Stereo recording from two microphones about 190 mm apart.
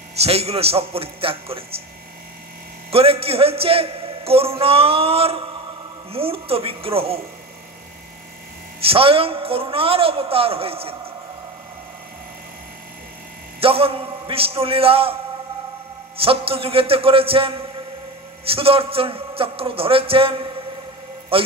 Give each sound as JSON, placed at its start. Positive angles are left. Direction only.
{"t": 0.1, "sound": "a man's voice", "side_deg": -35}
{"t": 2.9, "sound": "a man's voice", "side_deg": -30}
{"t": 8.8, "sound": "a man's voice", "side_deg": -30}
{"t": 13.6, "sound": "a man's voice", "side_deg": -30}
{"t": 16.2, "sound": "a man's voice", "side_deg": -30}